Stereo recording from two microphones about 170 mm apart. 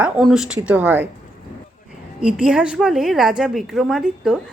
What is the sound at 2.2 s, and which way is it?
A woman's voice, 5° right (ahead or behind).